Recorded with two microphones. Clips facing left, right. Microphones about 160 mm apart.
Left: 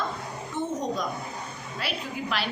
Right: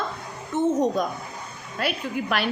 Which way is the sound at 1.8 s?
50° right (ahead or behind).